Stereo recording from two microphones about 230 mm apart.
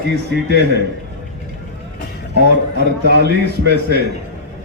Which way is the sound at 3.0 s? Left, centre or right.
Right.